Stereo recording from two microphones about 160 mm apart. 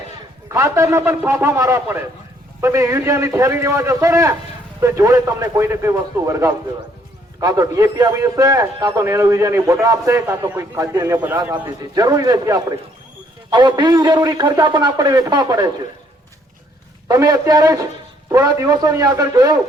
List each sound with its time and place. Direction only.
0.4 s a man's voice: 20° right (ahead or behind)
11.8 s a man's voice: 25° right (ahead or behind)
17.1 s a man's voice: 20° right (ahead or behind)